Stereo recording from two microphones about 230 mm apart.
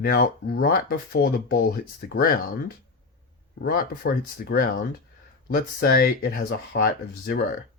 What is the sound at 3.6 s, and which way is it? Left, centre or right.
Speech, left.